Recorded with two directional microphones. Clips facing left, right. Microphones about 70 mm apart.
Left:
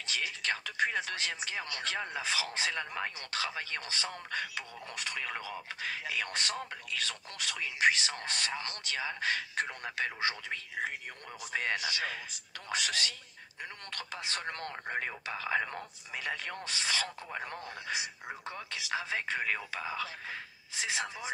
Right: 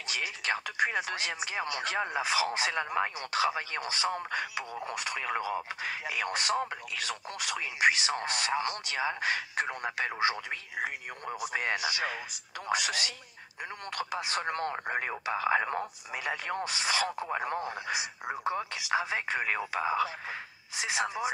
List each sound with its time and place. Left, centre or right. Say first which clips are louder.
0.0 s speech: right 1 dB; centre
6.5 s speech: right 8 dB; right
6.9 s speech: right 2 dB; centre